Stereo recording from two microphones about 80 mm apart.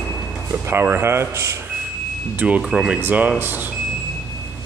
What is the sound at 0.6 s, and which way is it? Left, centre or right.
Speech, right.